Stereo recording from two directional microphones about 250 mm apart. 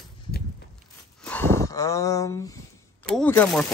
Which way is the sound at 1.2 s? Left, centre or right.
Centre.